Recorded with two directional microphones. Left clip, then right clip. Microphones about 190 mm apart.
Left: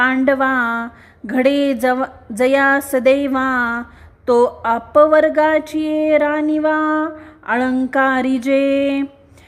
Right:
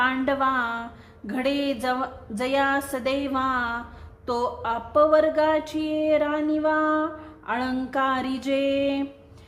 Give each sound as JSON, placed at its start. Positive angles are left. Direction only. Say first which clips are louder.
{"t": 0.0, "sound": "music", "louder": "left 8 dB", "side_deg": 30}